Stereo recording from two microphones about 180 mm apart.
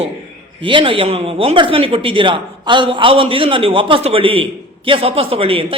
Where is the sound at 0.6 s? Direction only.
30° right (ahead or behind).